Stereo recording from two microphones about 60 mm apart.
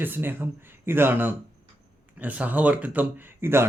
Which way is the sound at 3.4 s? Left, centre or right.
Right.